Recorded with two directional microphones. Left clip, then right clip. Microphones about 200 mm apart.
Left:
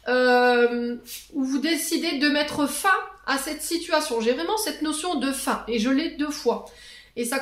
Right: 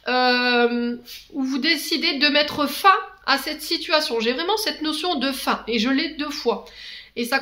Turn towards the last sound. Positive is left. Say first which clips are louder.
# right 2 dB
turn(degrees=-25)  # may be behind; listen again after turning